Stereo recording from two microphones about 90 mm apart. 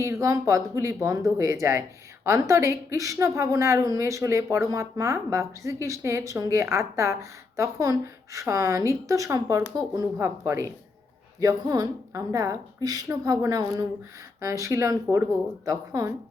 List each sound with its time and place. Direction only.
0.0 s speech: 35° right (ahead or behind)
11.3 s speech: 45° right (ahead or behind)